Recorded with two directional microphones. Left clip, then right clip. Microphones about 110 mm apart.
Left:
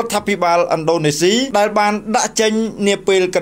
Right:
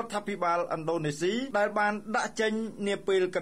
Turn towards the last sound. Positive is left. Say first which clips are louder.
# left 13 dB
turn(degrees=25)  # may be behind; listen again after turning